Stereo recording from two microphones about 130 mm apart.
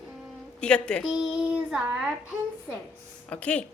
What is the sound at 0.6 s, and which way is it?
Speech, 10° left (ahead or behind).